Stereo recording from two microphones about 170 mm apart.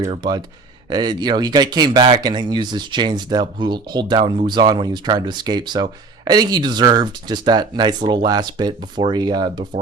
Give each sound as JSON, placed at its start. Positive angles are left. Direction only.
{"t": 0.1, "sound": "speech", "side_deg": -25}